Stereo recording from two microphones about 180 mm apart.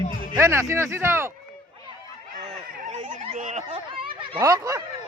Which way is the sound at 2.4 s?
40° right (ahead or behind).